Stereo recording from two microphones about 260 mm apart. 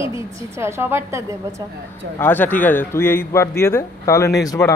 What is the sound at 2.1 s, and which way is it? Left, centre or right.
A man's voice, centre.